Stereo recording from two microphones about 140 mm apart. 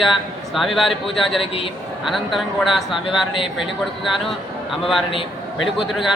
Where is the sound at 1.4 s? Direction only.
40° left (ahead or behind).